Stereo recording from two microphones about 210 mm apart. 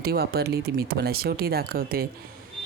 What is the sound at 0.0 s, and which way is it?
Speech, 50° right (ahead or behind).